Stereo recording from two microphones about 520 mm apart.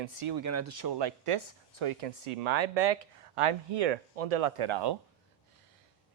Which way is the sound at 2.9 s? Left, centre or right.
Right.